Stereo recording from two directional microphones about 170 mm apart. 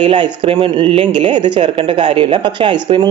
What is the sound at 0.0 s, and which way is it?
Speech, 25° right (ahead or behind).